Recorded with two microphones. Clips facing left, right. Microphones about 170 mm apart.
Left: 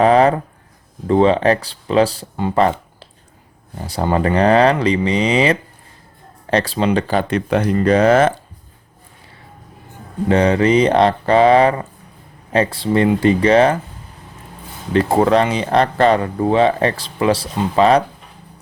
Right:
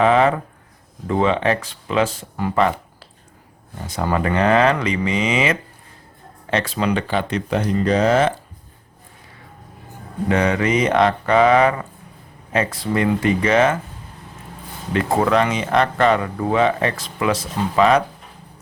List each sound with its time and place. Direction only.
0.0 s speech: 35° left (ahead or behind)
3.8 s speech: 30° left (ahead or behind)
7.1 s speech: 45° left (ahead or behind)
10.2 s speech: 30° left (ahead or behind)
14.9 s speech: 30° left (ahead or behind)